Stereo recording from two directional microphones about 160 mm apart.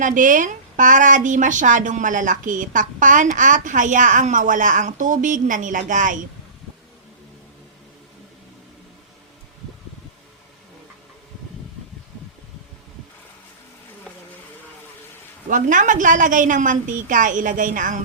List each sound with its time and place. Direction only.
0.0 s a woman's voice: 55° right (ahead or behind)
15.4 s a woman's voice: 55° right (ahead or behind)